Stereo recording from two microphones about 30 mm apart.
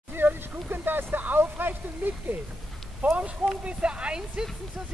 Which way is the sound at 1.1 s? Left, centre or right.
Right.